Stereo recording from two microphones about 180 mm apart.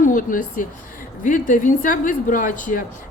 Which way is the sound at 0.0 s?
45° left (ahead or behind).